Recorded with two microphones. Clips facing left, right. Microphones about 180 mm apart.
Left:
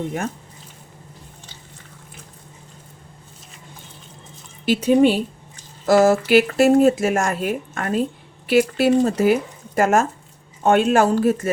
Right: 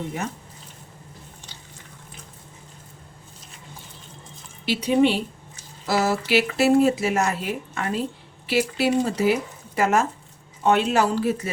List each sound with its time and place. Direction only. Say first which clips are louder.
4.6 s speech: left 4 dB; 45° left (ahead or behind)